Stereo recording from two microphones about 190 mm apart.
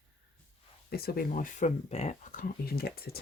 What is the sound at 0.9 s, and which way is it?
Speech, 55° left (ahead or behind).